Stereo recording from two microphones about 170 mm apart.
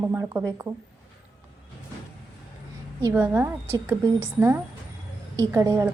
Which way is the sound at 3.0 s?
15° right (ahead or behind).